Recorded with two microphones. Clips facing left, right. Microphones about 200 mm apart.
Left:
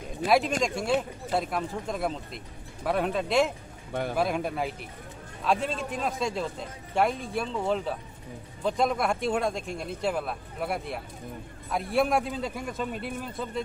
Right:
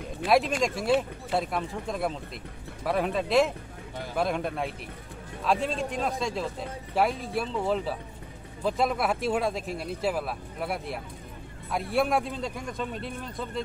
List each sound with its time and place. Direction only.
0.3 s speech: centre (ahead or behind)